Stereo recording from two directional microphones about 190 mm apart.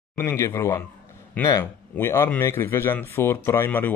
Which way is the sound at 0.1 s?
15° left (ahead or behind).